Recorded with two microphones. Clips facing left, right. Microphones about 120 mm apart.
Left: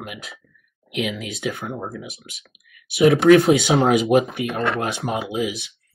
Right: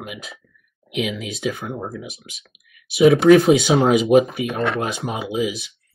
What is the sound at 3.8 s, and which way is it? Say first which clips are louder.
Speech: right 2 dB; centre (ahead or behind).